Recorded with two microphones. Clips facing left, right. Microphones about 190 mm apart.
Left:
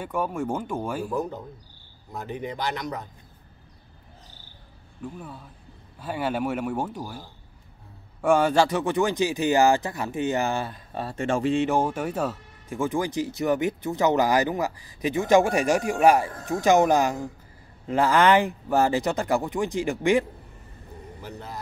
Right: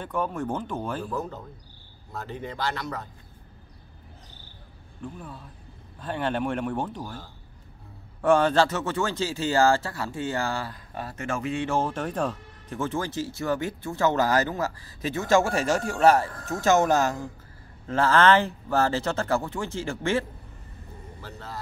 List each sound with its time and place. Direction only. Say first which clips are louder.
0.0 s speech: left 1 dB; 10° left (ahead or behind)
5.0 s speech: left 1 dB; 5° left (ahead or behind)